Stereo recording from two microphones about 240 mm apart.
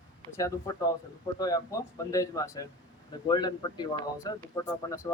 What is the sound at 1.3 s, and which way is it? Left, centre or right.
Speech, centre.